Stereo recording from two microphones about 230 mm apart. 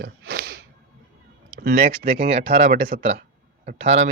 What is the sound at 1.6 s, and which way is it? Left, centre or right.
Speech, right.